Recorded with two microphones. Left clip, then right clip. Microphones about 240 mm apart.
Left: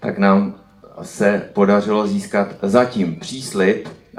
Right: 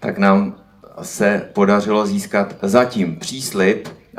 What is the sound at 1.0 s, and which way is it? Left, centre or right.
Speech, centre.